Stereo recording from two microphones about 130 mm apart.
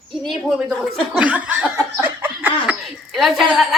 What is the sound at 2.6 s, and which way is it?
A woman's voice, 5° right (ahead or behind).